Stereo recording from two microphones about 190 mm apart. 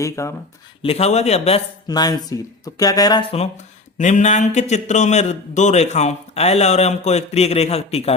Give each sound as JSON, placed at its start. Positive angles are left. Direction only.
{"t": 0.0, "sound": "speech", "side_deg": 15}
{"t": 0.8, "sound": "a man's voice", "side_deg": 30}
{"t": 1.9, "sound": "speech", "side_deg": 20}
{"t": 3.9, "sound": "a man's voice", "side_deg": 40}